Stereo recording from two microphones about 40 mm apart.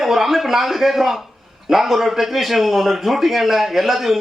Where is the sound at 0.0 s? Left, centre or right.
Centre.